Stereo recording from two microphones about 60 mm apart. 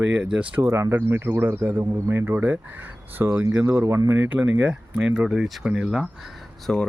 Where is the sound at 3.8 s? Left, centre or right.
Right.